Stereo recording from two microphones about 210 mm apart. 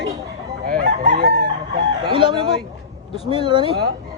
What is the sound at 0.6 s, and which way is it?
Chicken, 45° right (ahead or behind).